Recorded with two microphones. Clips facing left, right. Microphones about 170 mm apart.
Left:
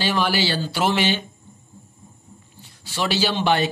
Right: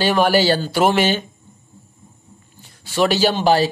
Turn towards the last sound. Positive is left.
turn(degrees=-35)  # may be behind; listen again after turning